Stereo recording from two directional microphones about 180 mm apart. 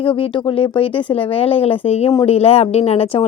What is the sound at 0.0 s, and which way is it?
A woman's voice, 30° left (ahead or behind).